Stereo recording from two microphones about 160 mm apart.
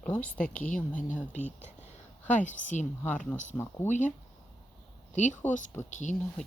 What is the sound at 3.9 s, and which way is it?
Speech, 50° left (ahead or behind).